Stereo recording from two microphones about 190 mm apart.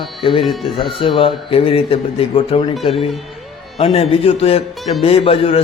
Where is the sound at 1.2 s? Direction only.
30° left (ahead or behind).